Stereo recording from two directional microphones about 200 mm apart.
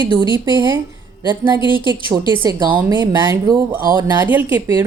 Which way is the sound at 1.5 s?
25° left (ahead or behind).